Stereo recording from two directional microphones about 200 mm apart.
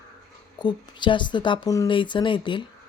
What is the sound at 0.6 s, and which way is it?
Speech, 20° left (ahead or behind).